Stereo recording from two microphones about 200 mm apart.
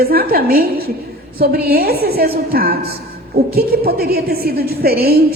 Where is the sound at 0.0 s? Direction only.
50° right (ahead or behind).